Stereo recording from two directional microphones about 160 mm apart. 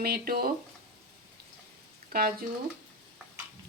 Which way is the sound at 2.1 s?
65° right (ahead or behind).